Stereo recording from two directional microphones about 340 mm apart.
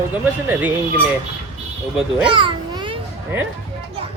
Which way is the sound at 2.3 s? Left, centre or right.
Centre.